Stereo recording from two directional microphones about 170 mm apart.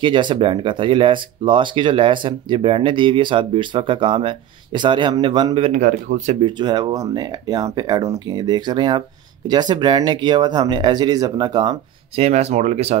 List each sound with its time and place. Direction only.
0.0 s speech: 30° right (ahead or behind)
6.4 s speech: 25° right (ahead or behind)
12.2 s speech: 40° right (ahead or behind)